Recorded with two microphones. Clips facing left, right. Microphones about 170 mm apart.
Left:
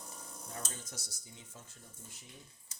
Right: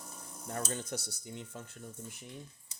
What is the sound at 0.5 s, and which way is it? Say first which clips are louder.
Speech: right 10 dB; 65° right (ahead or behind).